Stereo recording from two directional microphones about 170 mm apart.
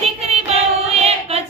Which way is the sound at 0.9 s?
35° right (ahead or behind).